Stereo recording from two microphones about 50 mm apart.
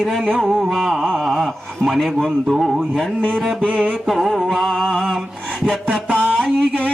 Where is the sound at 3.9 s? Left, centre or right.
Centre.